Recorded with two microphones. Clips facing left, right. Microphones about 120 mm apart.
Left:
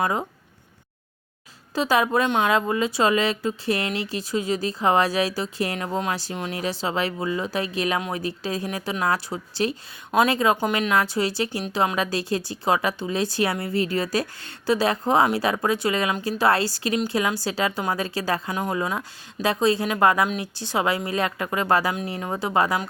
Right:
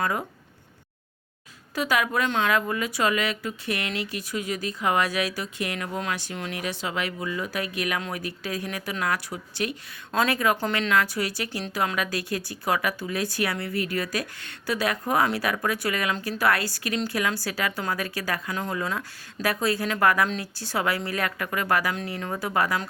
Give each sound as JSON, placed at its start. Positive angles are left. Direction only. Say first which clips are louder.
{"t": 0.0, "sound": "a woman's voice", "louder": "left 3 dB", "side_deg": 25}
{"t": 1.7, "sound": "a woman's voice", "louder": "left 4 dB", "side_deg": 30}